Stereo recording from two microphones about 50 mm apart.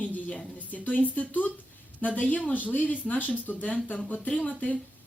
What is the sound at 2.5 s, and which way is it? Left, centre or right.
Speech, left.